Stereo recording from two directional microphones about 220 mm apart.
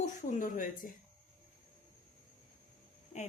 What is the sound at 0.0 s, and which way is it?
Speech, 35° left (ahead or behind).